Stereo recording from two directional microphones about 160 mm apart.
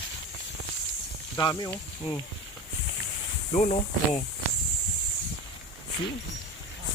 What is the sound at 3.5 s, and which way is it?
Speech, 45° left (ahead or behind).